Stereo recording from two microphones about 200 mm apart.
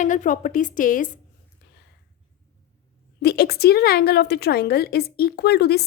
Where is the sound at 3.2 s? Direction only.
50° left (ahead or behind).